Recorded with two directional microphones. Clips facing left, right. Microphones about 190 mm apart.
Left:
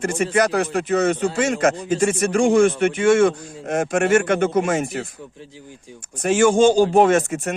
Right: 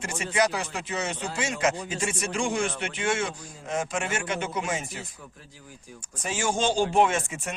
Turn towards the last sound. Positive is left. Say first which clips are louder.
# left 8 dB
turn(degrees=45)  # may be behind; listen again after turning